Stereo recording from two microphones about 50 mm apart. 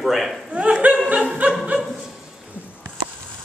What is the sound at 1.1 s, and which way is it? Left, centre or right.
Snicker, right.